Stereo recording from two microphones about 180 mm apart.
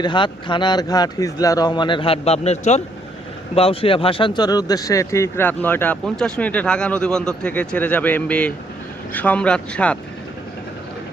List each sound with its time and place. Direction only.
0.0 s speech: 25° left (ahead or behind); by 10.0 s 5° left (ahead or behind)